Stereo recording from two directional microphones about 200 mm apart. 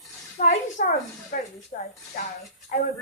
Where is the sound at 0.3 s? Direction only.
40° left (ahead or behind).